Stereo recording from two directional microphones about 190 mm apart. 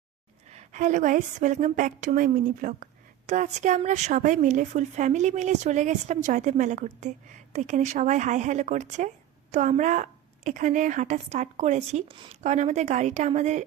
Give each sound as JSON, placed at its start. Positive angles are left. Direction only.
{"t": 0.5, "sound": "a woman's voice", "side_deg": -40}